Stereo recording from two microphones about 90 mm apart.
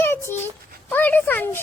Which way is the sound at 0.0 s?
30° left (ahead or behind).